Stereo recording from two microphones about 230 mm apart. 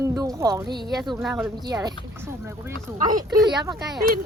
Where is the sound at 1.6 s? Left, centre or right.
Centre.